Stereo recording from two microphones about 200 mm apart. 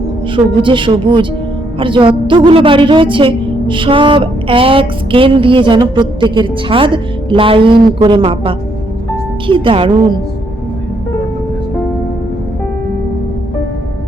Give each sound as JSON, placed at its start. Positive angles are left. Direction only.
{"t": 0.3, "sound": "a woman's voice", "side_deg": -25}